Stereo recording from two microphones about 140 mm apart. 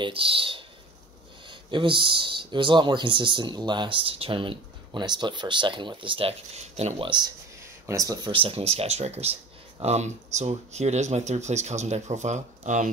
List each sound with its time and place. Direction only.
0.0 s speech: 40° right (ahead or behind)
7.8 s speech: 25° right (ahead or behind)
8.3 s speech: 40° right (ahead or behind); by 12.9 s 60° right (ahead or behind)